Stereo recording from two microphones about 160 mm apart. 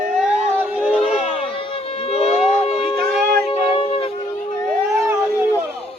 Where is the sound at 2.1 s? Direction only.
40° left (ahead or behind).